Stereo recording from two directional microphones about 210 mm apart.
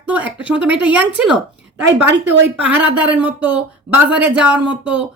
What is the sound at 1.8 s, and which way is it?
Speech, 55° right (ahead or behind).